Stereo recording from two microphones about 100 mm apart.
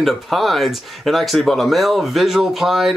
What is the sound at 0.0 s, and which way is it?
Speech, centre (ahead or behind).